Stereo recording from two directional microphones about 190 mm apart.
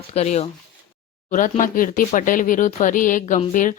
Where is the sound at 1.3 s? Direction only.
45° left (ahead or behind).